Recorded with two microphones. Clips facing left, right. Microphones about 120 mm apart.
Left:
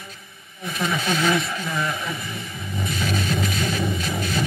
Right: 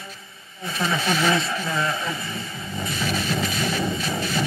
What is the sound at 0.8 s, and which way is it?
A man's voice, 25° right (ahead or behind).